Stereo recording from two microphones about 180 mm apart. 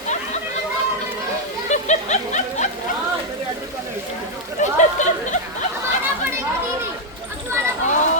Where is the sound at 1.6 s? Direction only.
40° left (ahead or behind).